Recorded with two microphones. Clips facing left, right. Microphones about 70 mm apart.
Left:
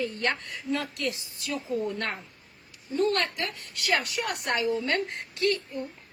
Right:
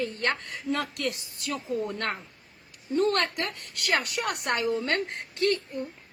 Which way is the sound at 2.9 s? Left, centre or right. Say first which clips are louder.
Right 1 dB; right.